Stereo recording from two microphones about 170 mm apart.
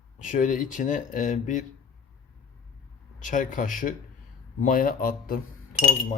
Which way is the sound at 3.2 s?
50° left (ahead or behind).